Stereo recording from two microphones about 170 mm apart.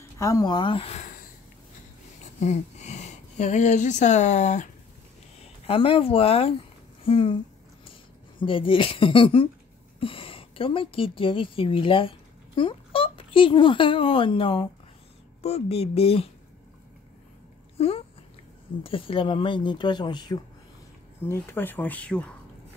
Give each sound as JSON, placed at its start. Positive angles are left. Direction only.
{"t": 0.2, "sound": "speech", "side_deg": 20}
{"t": 2.4, "sound": "speech", "side_deg": 40}
{"t": 5.4, "sound": "speech", "side_deg": 35}
{"t": 8.4, "sound": "speech", "side_deg": 30}
{"t": 17.7, "sound": "speech", "side_deg": 35}
{"t": 21.2, "sound": "speech", "side_deg": 15}